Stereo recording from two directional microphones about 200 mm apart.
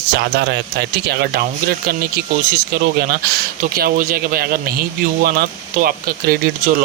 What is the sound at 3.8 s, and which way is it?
Speech, 45° right (ahead or behind).